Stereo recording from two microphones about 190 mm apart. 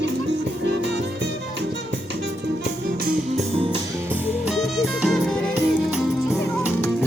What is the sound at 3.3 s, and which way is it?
Music, 30° right (ahead or behind).